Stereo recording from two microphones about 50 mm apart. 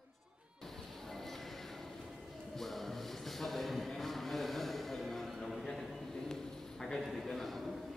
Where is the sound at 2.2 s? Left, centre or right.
Centre.